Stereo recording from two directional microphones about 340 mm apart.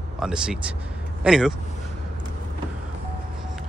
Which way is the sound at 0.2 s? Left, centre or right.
Centre.